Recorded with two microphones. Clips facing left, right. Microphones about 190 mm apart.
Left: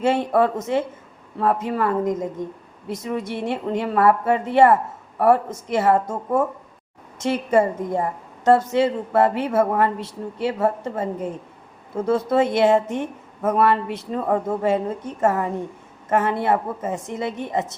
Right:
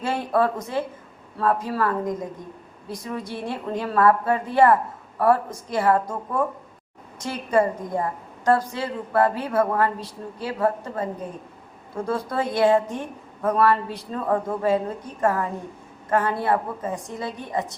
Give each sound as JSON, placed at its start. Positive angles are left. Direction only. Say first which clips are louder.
{"t": 0.0, "sound": "a woman's voice", "louder": "left 4 dB", "side_deg": 25}